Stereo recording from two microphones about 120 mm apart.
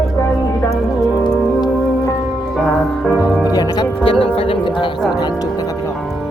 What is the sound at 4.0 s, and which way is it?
Speech, 50° left (ahead or behind).